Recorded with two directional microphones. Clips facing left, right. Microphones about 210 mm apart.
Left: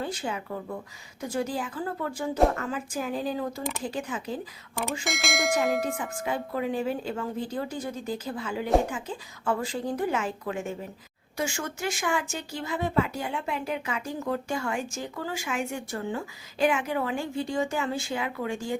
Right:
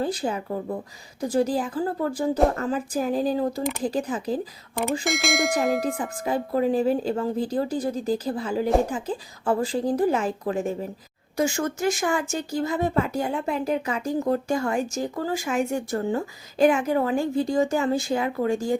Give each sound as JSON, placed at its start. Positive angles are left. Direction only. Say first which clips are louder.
{"t": 0.0, "sound": "speech", "louder": "right 6 dB", "side_deg": -35}
{"t": 5.0, "sound": "bell", "louder": "right 4 dB", "side_deg": 0}
{"t": 6.0, "sound": "speech", "louder": "right 4 dB", "side_deg": -35}